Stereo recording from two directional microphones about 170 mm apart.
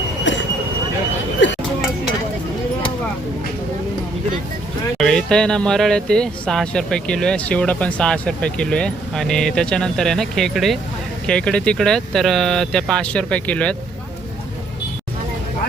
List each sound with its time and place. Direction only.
0.3 s train: 90° left
1.4 s a sound: 90° left
4.9 s speech: 5° left (ahead or behind)